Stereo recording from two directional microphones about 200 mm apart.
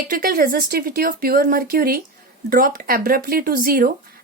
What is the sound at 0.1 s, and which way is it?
Speech, 45° right (ahead or behind).